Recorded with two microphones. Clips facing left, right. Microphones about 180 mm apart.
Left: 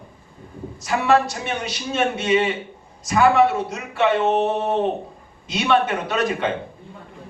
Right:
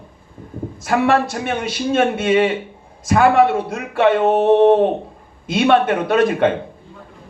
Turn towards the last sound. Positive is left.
turn(degrees=-55)  # may be behind; listen again after turning